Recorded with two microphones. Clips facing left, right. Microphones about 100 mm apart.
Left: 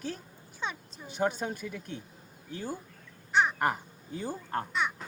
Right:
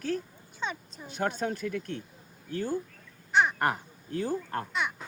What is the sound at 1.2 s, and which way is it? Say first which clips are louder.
Speech: right 1 dB; 10° left (ahead or behind).